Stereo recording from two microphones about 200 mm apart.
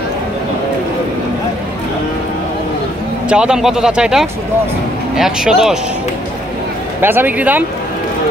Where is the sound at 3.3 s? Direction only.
5° right (ahead or behind).